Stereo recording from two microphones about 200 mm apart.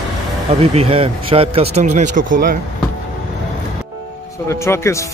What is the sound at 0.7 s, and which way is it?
Speech, 30° right (ahead or behind).